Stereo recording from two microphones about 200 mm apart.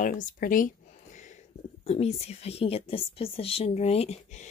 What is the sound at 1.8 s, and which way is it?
A woman's voice, 30° left (ahead or behind).